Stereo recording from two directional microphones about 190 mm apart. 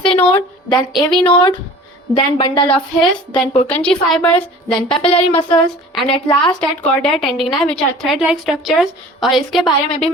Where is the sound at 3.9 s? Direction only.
5° left (ahead or behind).